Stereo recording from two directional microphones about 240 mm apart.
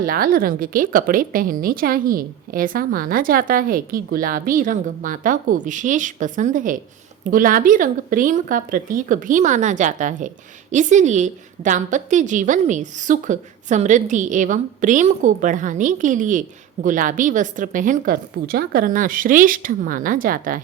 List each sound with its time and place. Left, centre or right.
0.0 s speech: right